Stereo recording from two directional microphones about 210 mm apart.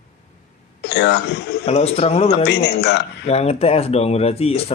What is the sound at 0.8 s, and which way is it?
Speech, 55° left (ahead or behind).